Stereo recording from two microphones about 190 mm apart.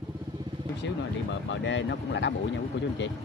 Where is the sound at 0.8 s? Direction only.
70° left (ahead or behind).